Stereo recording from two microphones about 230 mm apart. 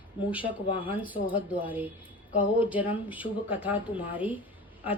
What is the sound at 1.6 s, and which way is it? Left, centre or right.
Speech, centre.